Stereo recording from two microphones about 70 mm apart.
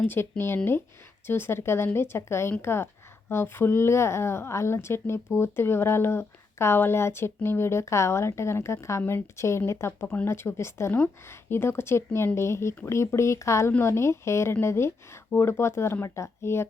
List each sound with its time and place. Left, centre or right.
0.0 s a woman's voice: left